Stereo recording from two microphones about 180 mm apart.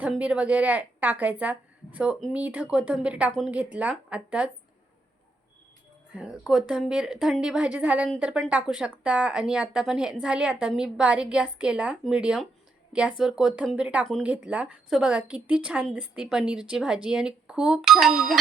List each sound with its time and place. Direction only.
0.0 s a woman's voice: 5° right (ahead or behind)
6.1 s speech: 5° right (ahead or behind)